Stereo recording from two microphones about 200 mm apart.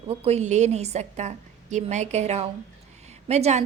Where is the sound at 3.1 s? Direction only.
35° right (ahead or behind).